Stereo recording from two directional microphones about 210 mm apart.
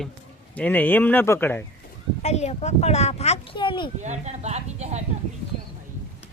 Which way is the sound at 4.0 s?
35° right (ahead or behind).